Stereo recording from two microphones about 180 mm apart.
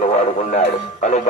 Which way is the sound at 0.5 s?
45° left (ahead or behind).